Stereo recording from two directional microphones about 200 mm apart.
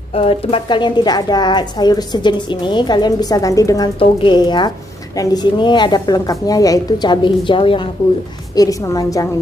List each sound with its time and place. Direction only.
0.1 s a woman's voice: 30° left (ahead or behind)